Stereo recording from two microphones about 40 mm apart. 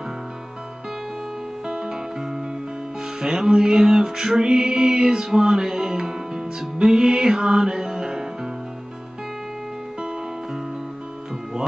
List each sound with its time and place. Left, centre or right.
1.7 s music: centre